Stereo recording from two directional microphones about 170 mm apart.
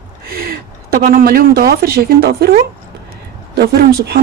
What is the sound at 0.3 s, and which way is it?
Speech, 60° right (ahead or behind).